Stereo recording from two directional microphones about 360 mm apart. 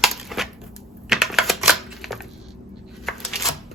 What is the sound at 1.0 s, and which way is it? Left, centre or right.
Typing, centre.